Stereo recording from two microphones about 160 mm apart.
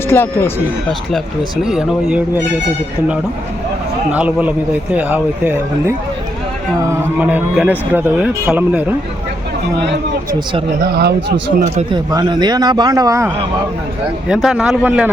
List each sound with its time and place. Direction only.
0.1 s speech: 15° left (ahead or behind)
1.6 s a man's voice: 5° right (ahead or behind)
4.1 s a man's voice: 10° right (ahead or behind)
6.9 s a man's voice: 10° right (ahead or behind)
12.1 s a man's voice: 25° right (ahead or behind)
14.3 s a man's voice: 5° right (ahead or behind)